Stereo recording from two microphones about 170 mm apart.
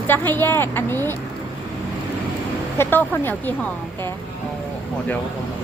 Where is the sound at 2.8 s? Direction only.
10° left (ahead or behind).